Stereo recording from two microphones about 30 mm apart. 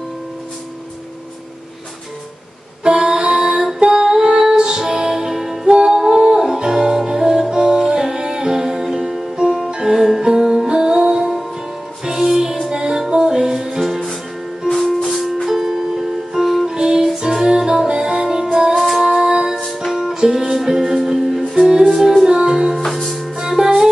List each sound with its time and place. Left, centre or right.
2.8 s music: right
5.7 s music: right
10.7 s music: right
14.7 s music: centre
16.6 s music: right
17.8 s music: right
18.8 s music: centre
19.1 s music: centre
21.6 s music: right